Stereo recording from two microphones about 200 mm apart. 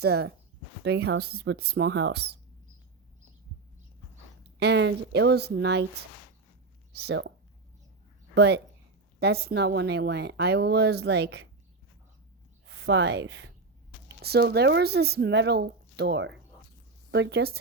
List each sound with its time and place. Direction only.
0.0 s a woman's voice: 55° right (ahead or behind)
4.6 s a woman's voice: 60° right (ahead or behind)
6.9 s a woman's voice: 55° right (ahead or behind)
8.4 s a woman's voice: 55° right (ahead or behind)
12.7 s a woman's voice: 60° right (ahead or behind)